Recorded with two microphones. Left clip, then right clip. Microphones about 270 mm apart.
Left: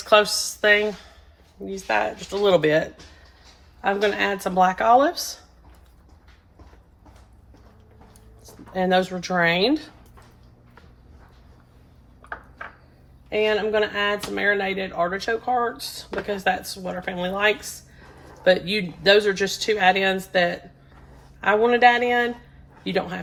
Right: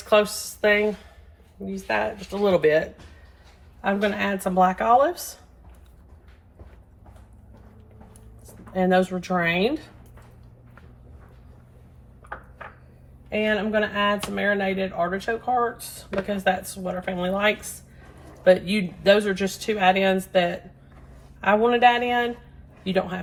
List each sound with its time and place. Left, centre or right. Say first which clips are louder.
0.0 s speech: left 3 dB; left
8.7 s speech: even; left
13.3 s speech: left 2 dB; left